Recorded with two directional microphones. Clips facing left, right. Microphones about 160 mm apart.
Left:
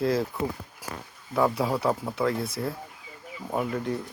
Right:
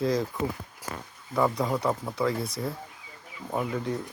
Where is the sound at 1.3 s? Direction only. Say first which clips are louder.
Left 1 dB; 5° left (ahead or behind).